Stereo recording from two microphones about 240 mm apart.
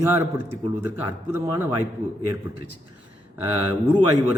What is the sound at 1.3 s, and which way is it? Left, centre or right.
Speech, centre.